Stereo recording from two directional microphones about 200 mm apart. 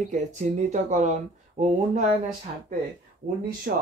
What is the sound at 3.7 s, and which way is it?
Speech, 50° right (ahead or behind).